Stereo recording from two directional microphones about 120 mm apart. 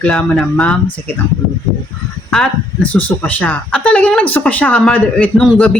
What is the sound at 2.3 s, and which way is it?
Speech, 10° left (ahead or behind).